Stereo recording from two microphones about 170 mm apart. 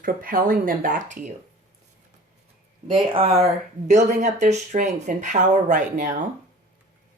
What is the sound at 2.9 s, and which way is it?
Speech, 30° right (ahead or behind).